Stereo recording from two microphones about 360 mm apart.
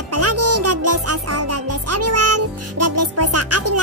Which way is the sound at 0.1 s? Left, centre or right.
Right.